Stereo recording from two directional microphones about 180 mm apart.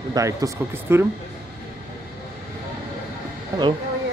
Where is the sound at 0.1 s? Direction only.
20° right (ahead or behind).